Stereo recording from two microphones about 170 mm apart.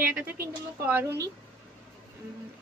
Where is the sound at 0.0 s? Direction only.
10° right (ahead or behind).